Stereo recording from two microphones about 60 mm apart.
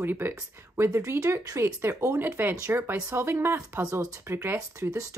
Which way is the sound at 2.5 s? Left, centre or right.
Right.